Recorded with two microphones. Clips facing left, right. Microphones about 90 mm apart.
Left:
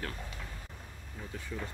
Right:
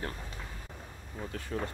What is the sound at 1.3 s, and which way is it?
Speech, 60° right (ahead or behind).